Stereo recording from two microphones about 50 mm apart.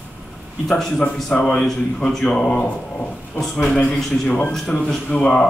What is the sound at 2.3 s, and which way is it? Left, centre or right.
Speech, left.